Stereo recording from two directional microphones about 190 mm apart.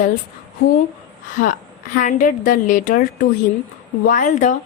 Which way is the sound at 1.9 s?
40° left (ahead or behind).